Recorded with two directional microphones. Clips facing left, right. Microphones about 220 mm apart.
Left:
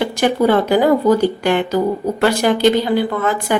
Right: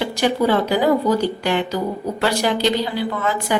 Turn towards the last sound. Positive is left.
turn(degrees=50)  # may be behind; listen again after turning